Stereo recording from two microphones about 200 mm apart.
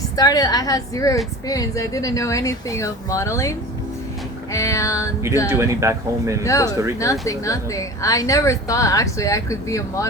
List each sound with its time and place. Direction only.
0.2 s a woman's voice: 20° left (ahead or behind)
4.5 s a woman's voice: 15° left (ahead or behind)
5.5 s speech: 15° right (ahead or behind)
6.4 s a woman's voice: 15° left (ahead or behind)